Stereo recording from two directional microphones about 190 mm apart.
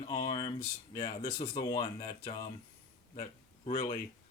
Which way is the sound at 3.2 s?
45° left (ahead or behind).